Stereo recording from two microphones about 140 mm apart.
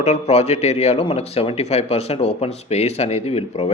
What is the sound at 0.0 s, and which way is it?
Speech, 50° left (ahead or behind).